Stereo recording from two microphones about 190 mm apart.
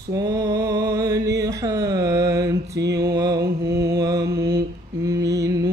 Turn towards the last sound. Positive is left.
turn(degrees=-15)  # may be behind; listen again after turning